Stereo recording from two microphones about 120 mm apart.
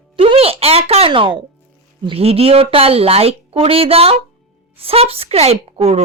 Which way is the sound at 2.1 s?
55° right (ahead or behind).